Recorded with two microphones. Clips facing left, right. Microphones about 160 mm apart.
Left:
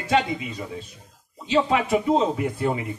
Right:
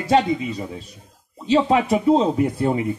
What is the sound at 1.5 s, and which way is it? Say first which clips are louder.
A man's voice: right 4 dB; 35° right (ahead or behind).